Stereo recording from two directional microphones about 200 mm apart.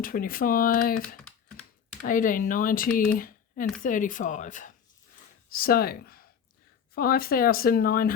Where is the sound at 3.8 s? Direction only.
40° left (ahead or behind).